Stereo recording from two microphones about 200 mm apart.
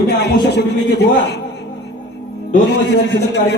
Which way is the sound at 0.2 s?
60° left (ahead or behind).